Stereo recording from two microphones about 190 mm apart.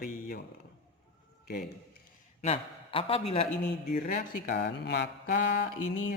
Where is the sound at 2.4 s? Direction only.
30° left (ahead or behind).